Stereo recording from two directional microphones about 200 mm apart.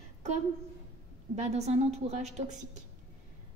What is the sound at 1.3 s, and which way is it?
A woman's voice, 35° right (ahead or behind).